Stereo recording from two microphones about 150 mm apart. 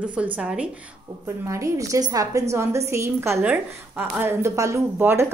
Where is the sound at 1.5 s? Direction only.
20° right (ahead or behind).